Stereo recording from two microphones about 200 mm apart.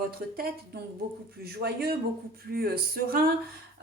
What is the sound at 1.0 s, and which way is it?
A woman's voice, 50° right (ahead or behind).